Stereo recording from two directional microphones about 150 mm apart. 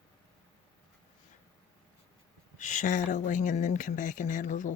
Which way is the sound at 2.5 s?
55° left (ahead or behind).